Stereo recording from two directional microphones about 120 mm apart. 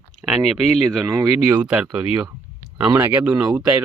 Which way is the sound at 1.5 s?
15° right (ahead or behind).